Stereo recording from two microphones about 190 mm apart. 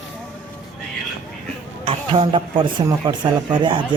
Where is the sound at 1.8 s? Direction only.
30° right (ahead or behind).